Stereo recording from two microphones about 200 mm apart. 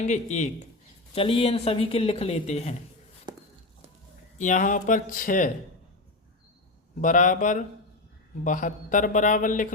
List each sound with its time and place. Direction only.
0.0 s a man's voice: 35° left (ahead or behind)
3.3 s a sound: 20° right (ahead or behind)
4.4 s a man's voice: 40° left (ahead or behind)
7.0 s a man's voice: 40° left (ahead or behind)